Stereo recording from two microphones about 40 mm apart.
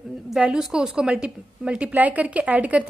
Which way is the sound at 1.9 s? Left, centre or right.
Right.